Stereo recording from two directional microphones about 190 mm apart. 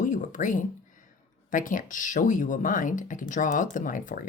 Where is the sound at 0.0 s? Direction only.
40° left (ahead or behind).